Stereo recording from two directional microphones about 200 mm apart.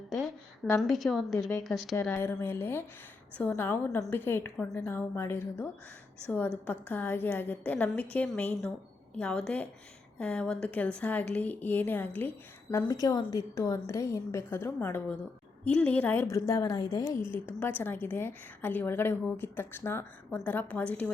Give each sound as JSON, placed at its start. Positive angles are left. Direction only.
{"t": 0.8, "sound": "a woman's voice", "side_deg": 0}
{"t": 1.4, "sound": "a woman's voice", "side_deg": 15}
{"t": 1.6, "sound": "a woman's voice", "side_deg": 0}
{"t": 2.0, "sound": "a woman's voice", "side_deg": 10}